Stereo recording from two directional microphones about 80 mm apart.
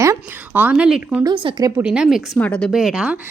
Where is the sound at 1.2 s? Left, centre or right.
Right.